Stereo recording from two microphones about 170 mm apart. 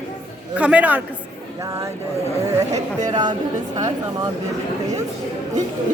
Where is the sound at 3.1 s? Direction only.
25° right (ahead or behind).